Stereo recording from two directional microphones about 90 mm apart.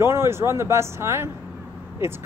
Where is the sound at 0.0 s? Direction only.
30° right (ahead or behind).